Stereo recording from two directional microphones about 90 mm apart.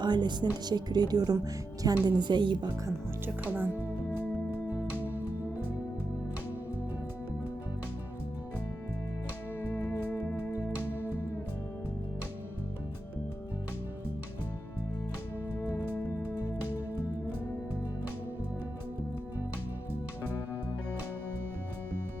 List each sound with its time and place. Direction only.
0.0 s a woman's voice: 55° right (ahead or behind)
3.2 s speech: 20° right (ahead or behind)
4.9 s music: 20° right (ahead or behind)
9.6 s music: 30° left (ahead or behind)